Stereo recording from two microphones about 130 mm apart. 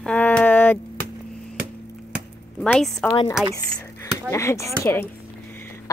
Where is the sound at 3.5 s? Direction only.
20° left (ahead or behind).